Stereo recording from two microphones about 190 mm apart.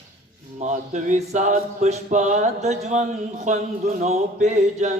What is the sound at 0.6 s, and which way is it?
A capella, 40° right (ahead or behind).